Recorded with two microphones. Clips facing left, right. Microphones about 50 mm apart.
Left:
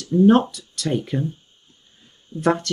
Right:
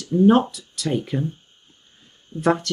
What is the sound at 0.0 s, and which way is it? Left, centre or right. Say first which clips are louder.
Speech: left 1 dB; centre.